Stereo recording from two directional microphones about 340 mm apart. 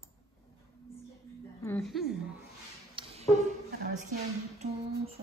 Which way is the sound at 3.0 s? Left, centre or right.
Centre.